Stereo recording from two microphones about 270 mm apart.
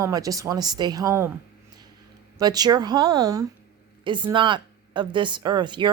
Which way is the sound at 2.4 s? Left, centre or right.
Centre.